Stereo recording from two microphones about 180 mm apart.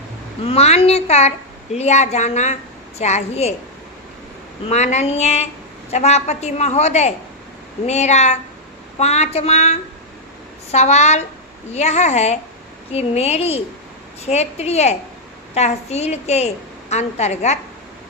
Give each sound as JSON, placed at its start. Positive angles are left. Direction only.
{"t": 0.4, "sound": "a woman's voice", "side_deg": 35}
{"t": 4.7, "sound": "a woman's voice", "side_deg": 40}